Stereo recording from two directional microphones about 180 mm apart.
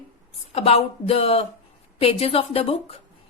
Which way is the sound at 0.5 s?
35° left (ahead or behind).